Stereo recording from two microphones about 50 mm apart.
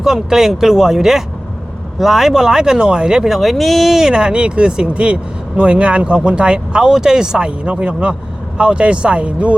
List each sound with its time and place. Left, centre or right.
0.0 s speech: centre; by 9.6 s right